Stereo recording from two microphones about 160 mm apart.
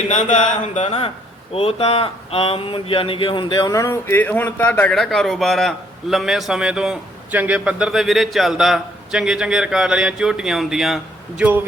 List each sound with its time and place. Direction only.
0.1 s speech: 50° left (ahead or behind); by 11.6 s 10° right (ahead or behind)